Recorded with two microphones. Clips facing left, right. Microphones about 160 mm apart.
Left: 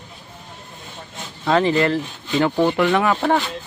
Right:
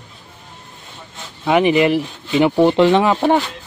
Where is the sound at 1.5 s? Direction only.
15° right (ahead or behind).